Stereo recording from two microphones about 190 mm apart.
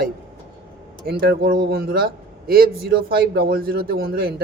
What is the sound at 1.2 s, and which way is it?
A man's voice, 55° right (ahead or behind).